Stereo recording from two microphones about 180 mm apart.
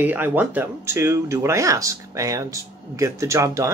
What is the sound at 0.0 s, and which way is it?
Speech, 10° right (ahead or behind).